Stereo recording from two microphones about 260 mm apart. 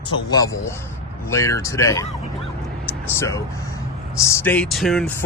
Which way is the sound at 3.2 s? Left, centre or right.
Centre.